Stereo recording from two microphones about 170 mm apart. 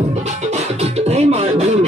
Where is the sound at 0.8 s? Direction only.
40° right (ahead or behind).